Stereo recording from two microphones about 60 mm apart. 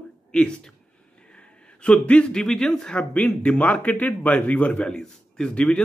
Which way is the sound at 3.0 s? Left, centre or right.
Left.